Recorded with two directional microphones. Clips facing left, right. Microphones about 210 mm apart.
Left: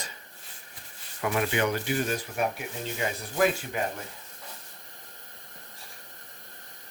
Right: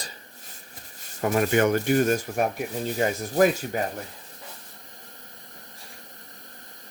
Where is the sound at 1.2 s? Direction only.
40° right (ahead or behind).